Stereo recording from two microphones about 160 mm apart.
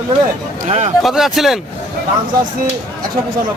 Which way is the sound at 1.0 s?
Centre (ahead or behind).